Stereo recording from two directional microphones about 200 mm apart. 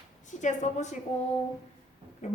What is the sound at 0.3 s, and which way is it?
A woman's voice, 35° left (ahead or behind).